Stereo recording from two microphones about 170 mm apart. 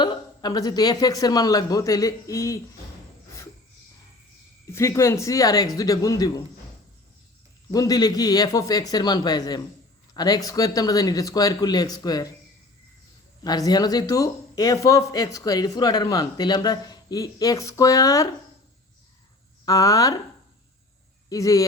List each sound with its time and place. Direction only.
0.0 s speech: 25° left (ahead or behind)
4.6 s speech: 15° left (ahead or behind)
7.7 s speech: 20° left (ahead or behind)
13.4 s speech: 20° left (ahead or behind)
19.6 s speech: 20° left (ahead or behind)
21.2 s speech: 20° left (ahead or behind)